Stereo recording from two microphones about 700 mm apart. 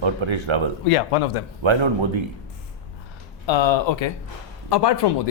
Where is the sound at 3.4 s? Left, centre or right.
Left.